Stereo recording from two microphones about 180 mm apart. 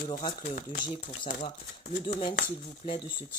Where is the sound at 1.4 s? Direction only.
40° left (ahead or behind).